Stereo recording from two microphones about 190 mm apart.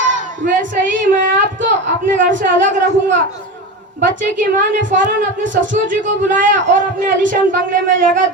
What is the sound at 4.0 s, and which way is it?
Child singing, 45° right (ahead or behind).